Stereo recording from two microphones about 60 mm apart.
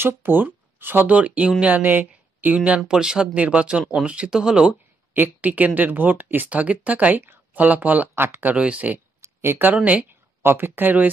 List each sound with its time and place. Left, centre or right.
0.0 s speech: right
1.0 s speech: right
2.9 s speech: centre
5.1 s speech: right
8.1 s speech: right
8.5 s speech: right
9.2 s a sound: right
10.4 s speech: right